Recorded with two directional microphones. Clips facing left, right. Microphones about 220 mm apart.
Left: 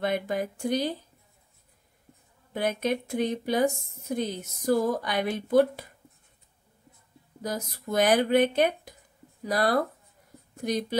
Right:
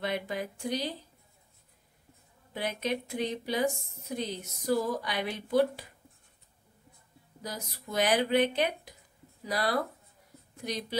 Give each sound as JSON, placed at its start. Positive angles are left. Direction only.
{"t": 0.0, "sound": "a woman's voice", "side_deg": 50}
{"t": 2.5, "sound": "a woman's voice", "side_deg": 50}
{"t": 7.4, "sound": "a woman's voice", "side_deg": 50}